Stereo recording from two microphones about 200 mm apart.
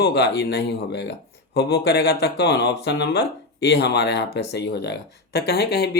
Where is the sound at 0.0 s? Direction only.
55° left (ahead or behind).